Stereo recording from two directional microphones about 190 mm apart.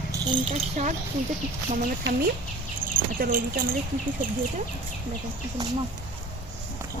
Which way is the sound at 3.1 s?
50° right (ahead or behind).